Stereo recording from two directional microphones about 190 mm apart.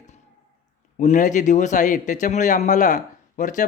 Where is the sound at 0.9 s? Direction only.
40° left (ahead or behind).